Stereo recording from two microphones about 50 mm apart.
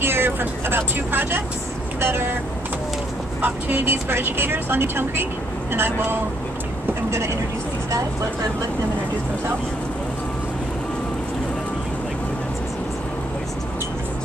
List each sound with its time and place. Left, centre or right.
0.0 s speech: right
3.3 s speech: right
3.8 s speech: right